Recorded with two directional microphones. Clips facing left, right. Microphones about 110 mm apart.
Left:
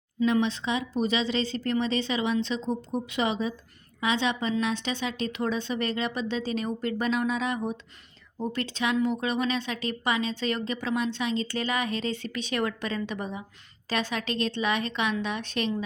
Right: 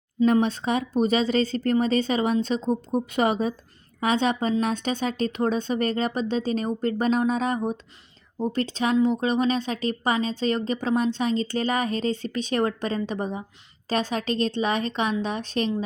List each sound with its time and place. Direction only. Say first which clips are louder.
0.3 s a woman's voice: right 4 dB; 50° right (ahead or behind)